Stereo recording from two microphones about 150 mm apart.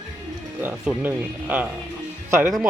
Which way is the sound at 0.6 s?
10° right (ahead or behind).